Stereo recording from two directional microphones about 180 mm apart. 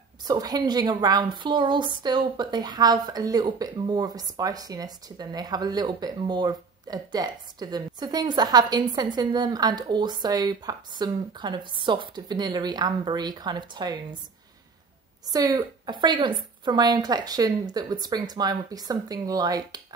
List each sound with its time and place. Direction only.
0.2 s a woman's voice: 20° right (ahead or behind)
15.3 s a woman's voice: 20° right (ahead or behind)